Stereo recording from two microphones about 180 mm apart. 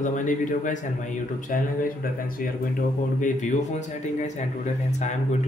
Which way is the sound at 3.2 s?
40° left (ahead or behind).